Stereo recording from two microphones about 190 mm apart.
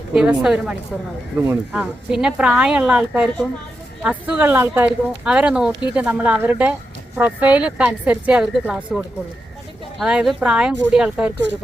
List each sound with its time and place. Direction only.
0.1 s a woman's voice: 5° right (ahead or behind)